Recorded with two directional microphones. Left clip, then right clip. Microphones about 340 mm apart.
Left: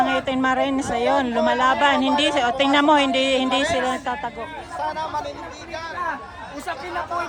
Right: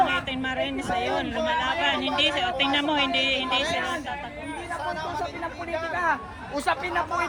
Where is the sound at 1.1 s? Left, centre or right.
Left.